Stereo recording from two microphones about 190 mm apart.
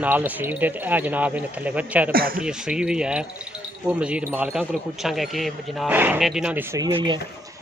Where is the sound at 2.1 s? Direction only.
50° right (ahead or behind).